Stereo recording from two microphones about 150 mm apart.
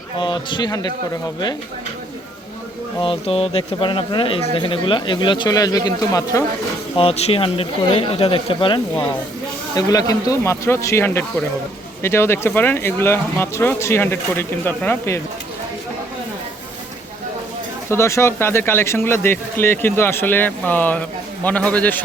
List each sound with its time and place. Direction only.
0.2 s speech: 30° left (ahead or behind)
3.0 s speech: 35° left (ahead or behind)
6.9 s a man's voice: 40° left (ahead or behind); by 15.2 s 15° left (ahead or behind)
17.8 s a man's voice: 20° left (ahead or behind)